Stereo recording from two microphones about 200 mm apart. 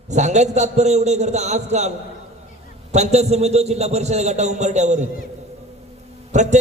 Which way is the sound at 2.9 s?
35° right (ahead or behind).